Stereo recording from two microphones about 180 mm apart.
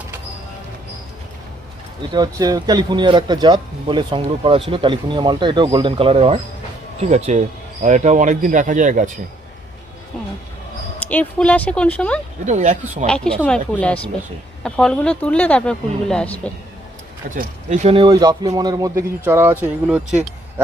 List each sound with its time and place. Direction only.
2.1 s speech: 20° right (ahead or behind); by 9.1 s 45° right (ahead or behind)
11.1 s speech: 5° left (ahead or behind)
12.5 s speech: 40° right (ahead or behind)
13.1 s speech: 5° left (ahead or behind)
17.3 s speech: 40° right (ahead or behind)
18.1 s speech: 20° right (ahead or behind)